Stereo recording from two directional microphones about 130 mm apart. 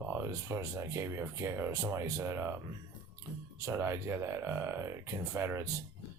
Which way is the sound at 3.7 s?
20° right (ahead or behind).